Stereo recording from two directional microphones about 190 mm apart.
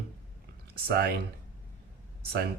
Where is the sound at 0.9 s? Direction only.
55° right (ahead or behind).